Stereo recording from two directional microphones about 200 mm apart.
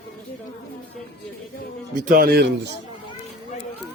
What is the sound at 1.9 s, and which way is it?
Speech, 40° right (ahead or behind).